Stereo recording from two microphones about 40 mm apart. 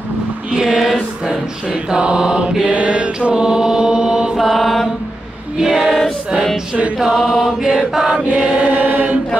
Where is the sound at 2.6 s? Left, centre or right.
Right.